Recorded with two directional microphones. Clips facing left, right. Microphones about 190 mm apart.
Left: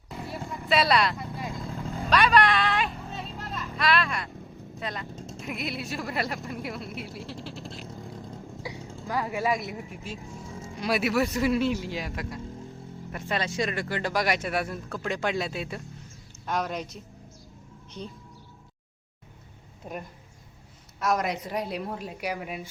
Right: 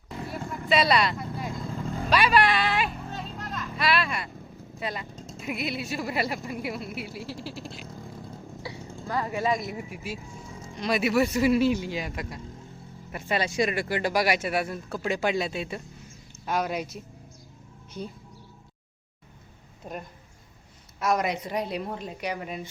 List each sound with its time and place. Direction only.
0.1 s vehicle: centre (ahead or behind)
4.8 s speech: 5° right (ahead or behind)
8.2 s vehicle: 15° left (ahead or behind)
9.5 s speech: centre (ahead or behind)
19.9 s speech: 5° left (ahead or behind)